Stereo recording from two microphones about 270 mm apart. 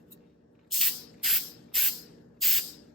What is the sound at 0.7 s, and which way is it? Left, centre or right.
Spray, centre.